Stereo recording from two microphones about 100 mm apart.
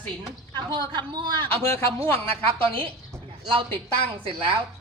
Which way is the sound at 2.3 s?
70° right (ahead or behind).